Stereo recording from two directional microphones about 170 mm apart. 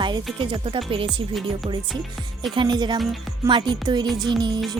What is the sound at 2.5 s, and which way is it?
Speech, 25° right (ahead or behind).